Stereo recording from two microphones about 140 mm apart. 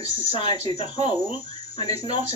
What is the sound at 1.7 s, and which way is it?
Speech, 30° left (ahead or behind).